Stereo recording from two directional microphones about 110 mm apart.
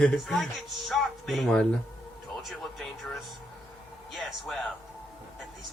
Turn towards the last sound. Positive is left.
turn(degrees=5)  # may be behind; listen again after turning